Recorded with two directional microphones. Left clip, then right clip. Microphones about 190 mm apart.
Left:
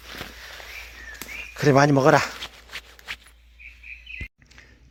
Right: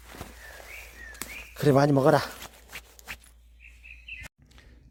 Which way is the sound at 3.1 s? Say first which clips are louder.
Left 6 dB; 25° right (ahead or behind).